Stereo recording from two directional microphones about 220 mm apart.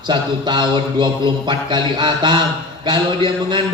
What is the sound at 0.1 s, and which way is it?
Speech, 20° right (ahead or behind).